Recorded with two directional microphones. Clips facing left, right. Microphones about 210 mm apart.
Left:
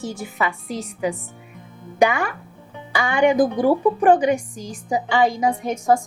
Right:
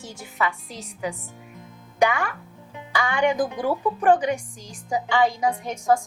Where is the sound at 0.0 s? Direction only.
10° left (ahead or behind).